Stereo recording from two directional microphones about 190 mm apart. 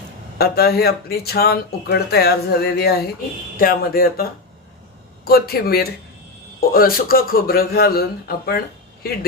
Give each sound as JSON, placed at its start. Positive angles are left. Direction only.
{"t": 0.3, "sound": "a man's voice", "side_deg": 55}